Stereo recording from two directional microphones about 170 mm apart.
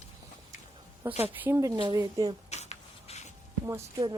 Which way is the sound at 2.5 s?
40° left (ahead or behind).